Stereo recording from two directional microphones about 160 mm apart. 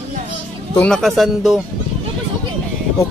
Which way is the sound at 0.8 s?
5° left (ahead or behind).